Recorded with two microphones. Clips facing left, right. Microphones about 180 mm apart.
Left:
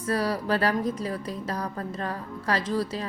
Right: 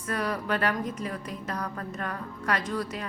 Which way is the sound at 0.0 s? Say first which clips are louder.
Left 4 dB; 35° left (ahead or behind).